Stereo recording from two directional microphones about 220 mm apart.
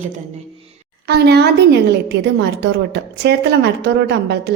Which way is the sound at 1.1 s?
50° right (ahead or behind).